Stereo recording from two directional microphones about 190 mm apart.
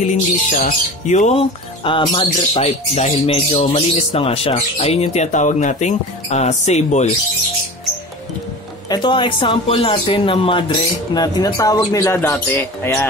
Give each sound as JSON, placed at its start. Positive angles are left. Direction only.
{"t": 0.0, "sound": "speech", "side_deg": 40}
{"t": 8.8, "sound": "speech", "side_deg": 25}